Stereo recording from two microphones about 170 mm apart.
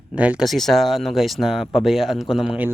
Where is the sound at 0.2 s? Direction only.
5° right (ahead or behind).